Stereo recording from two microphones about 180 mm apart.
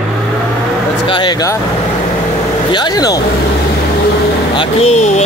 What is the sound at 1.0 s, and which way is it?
Speech, 25° left (ahead or behind).